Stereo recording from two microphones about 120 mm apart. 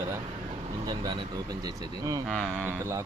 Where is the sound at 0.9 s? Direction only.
35° right (ahead or behind).